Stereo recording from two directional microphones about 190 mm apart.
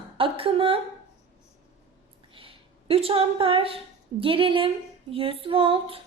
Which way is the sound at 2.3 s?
30° right (ahead or behind).